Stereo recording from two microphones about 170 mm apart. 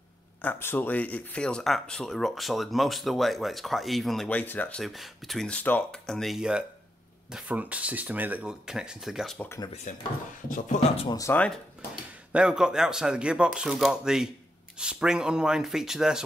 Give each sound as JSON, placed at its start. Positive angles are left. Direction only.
{"t": 0.4, "sound": "speech", "side_deg": 10}
{"t": 9.9, "sound": "speech", "side_deg": 45}
{"t": 11.1, "sound": "speech", "side_deg": 15}
{"t": 11.4, "sound": "speech", "side_deg": 0}